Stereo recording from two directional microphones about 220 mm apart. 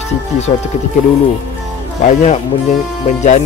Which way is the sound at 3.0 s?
30° left (ahead or behind).